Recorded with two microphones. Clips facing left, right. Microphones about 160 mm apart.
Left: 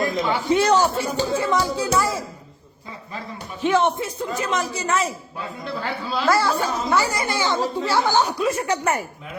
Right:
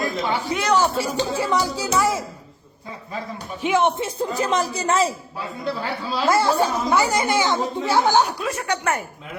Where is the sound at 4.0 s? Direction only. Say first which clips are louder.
Right 2 dB; 35° right (ahead or behind).